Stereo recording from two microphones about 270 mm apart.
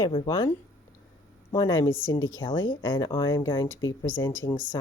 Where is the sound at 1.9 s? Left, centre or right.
Left.